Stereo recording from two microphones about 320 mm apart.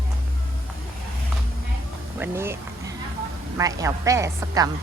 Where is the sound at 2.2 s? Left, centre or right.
Centre.